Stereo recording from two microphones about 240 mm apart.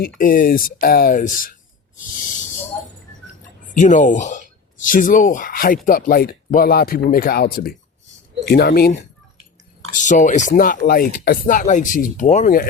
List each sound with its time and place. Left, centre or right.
0.2 s speech: left
3.8 s speech: left
10.0 s speech: left